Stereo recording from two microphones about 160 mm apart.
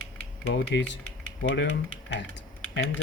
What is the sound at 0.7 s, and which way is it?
Speech, 90° left.